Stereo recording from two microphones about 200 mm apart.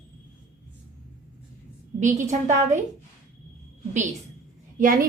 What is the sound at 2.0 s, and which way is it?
Speech, 35° right (ahead or behind).